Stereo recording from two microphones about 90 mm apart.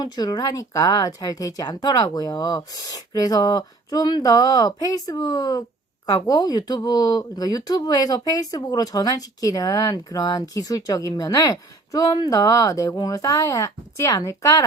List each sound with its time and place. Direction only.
0.0 s speech: 50° left (ahead or behind)